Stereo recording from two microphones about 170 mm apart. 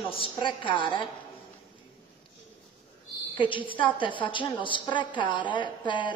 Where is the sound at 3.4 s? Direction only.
30° left (ahead or behind).